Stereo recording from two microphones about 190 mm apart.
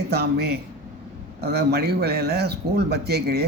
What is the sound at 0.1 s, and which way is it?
A man's voice, 55° right (ahead or behind).